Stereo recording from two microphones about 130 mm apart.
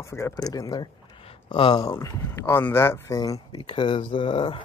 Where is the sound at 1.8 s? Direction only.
20° left (ahead or behind).